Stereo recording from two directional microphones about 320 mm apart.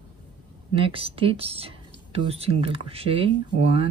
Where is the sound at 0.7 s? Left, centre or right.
Centre.